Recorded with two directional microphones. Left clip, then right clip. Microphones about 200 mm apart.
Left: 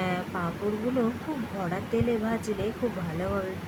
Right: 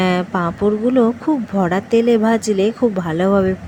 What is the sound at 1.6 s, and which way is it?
Speech, 40° right (ahead or behind).